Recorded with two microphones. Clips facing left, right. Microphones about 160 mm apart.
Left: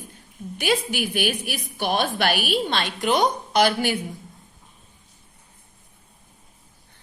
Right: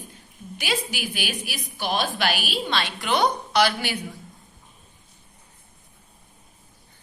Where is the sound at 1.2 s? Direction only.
55° left (ahead or behind).